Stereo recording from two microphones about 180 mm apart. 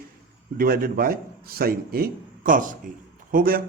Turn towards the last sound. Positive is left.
turn(degrees=-50)  # may be behind; listen again after turning